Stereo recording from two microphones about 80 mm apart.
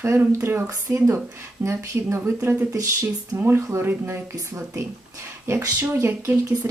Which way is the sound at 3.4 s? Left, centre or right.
Right.